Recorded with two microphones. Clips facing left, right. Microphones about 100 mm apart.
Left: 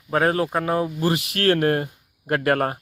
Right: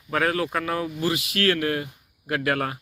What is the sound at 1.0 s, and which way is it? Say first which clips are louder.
Speech: left 1 dB; 55° left (ahead or behind).